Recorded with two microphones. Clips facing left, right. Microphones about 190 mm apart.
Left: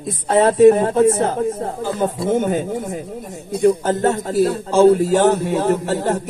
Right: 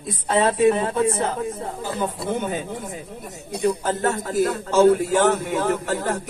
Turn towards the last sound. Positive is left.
turn(degrees=40)  # may be behind; listen again after turning